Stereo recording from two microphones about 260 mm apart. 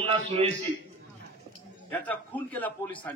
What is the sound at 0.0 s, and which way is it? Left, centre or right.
Speech, right.